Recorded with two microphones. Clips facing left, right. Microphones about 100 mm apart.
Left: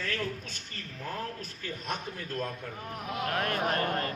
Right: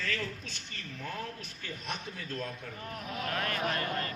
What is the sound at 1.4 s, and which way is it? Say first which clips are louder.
A man's voice: left 4 dB; 45° left (ahead or behind).